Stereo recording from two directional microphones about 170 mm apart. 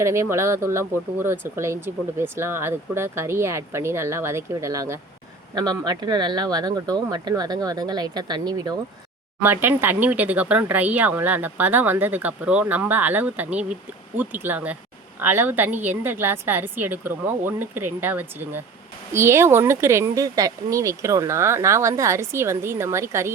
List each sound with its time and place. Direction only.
0.0 s speech: 15° right (ahead or behind)
9.4 s speech: 10° right (ahead or behind)